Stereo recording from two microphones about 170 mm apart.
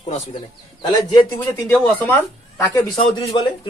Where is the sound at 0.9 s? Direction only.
25° left (ahead or behind).